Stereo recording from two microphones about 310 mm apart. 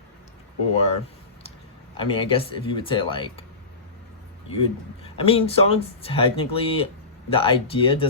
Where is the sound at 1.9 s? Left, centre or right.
Centre.